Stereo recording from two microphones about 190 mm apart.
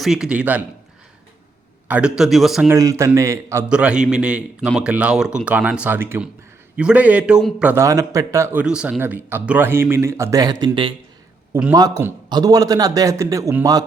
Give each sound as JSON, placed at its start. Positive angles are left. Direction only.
{"t": 0.0, "sound": "speech", "side_deg": -5}
{"t": 1.9, "sound": "speech", "side_deg": -5}
{"t": 2.6, "sound": "a man's voice", "side_deg": -15}
{"t": 8.6, "sound": "a man's voice", "side_deg": -5}